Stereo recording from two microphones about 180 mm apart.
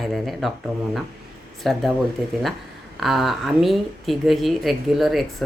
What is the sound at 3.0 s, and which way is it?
Speech, centre (ahead or behind).